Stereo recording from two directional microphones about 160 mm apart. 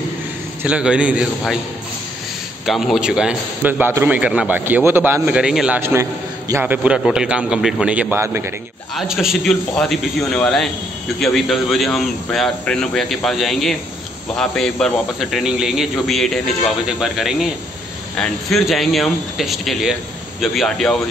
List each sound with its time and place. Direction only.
0.7 s a man's voice: 5° right (ahead or behind)
2.6 s a man's voice: centre (ahead or behind)
5.8 s a man's voice: 15° right (ahead or behind)
8.9 s a man's voice: 5° right (ahead or behind)